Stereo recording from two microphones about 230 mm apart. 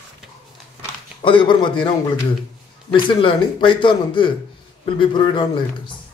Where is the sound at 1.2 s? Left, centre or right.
Left.